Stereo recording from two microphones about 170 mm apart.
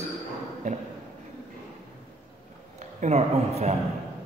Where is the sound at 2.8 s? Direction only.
40° right (ahead or behind).